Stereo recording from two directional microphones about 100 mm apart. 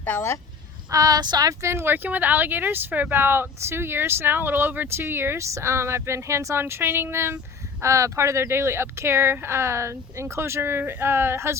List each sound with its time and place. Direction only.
0.0 s speech: 20° left (ahead or behind)
0.9 s speech: 35° right (ahead or behind)